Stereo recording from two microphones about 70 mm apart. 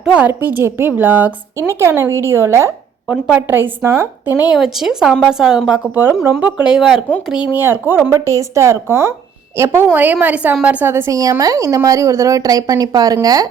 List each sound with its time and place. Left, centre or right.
0.0 s a woman's voice: centre
0.3 s a woman's voice: right
1.5 s a woman's voice: right
3.1 s a woman's voice: centre
3.8 s a woman's voice: right
4.5 s a woman's voice: centre
5.9 s a woman's voice: right
6.4 s a woman's voice: centre
7.5 s a woman's voice: right
8.1 s a woman's voice: right
9.8 s a woman's voice: right
10.8 s a woman's voice: right
11.1 s speech: right